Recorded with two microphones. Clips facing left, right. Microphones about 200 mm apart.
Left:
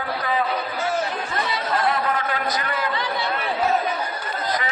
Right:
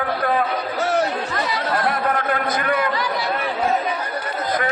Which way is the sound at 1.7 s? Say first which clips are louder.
Even; 55° right (ahead or behind).